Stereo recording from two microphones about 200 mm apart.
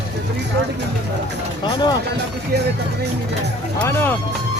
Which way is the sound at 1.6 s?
20° left (ahead or behind).